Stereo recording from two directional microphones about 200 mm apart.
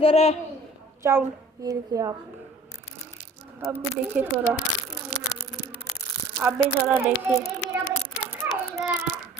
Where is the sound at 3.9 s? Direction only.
10° right (ahead or behind).